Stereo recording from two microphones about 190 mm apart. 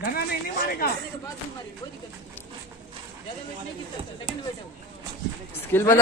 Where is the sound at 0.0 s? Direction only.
50° left (ahead or behind).